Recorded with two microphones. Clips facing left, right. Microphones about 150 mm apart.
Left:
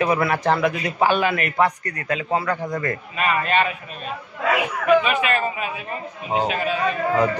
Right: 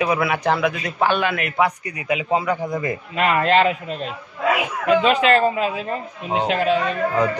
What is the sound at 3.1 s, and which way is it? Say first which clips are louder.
Speech: right 4 dB; 75° right (ahead or behind).